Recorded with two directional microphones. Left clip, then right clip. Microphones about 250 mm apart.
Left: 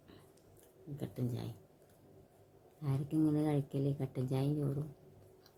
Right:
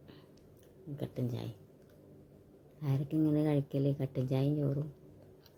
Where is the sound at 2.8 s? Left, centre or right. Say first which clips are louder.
Right 1 dB; centre.